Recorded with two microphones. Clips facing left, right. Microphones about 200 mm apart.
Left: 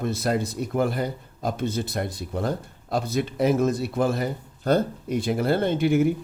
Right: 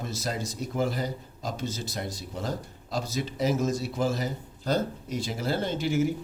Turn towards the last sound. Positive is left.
turn(degrees=60)  # may be behind; listen again after turning